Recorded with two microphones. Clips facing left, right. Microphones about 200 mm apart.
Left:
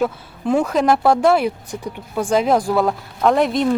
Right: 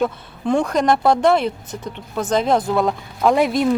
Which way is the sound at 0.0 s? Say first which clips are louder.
Even; 5° left (ahead or behind).